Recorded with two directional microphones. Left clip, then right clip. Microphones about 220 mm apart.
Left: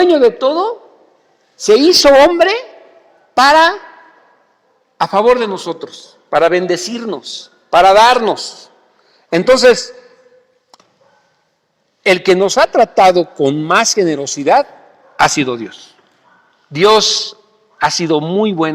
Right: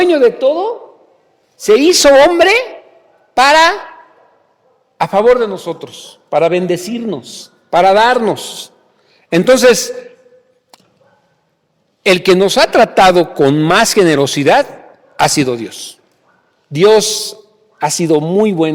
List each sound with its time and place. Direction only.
0.0 s a sound: 30° right (ahead or behind)
0.3 s a man's voice: 15° right (ahead or behind)
1.9 s a man's voice: 40° right (ahead or behind)
4.9 s a man's voice: 25° right (ahead or behind)
6.7 s a man's voice: 15° right (ahead or behind); by 9.6 s 30° right (ahead or behind)
12.0 s a man's voice: 35° right (ahead or behind)
13.4 s a man's voice: 40° right (ahead or behind)
17.0 s speech: 50° right (ahead or behind)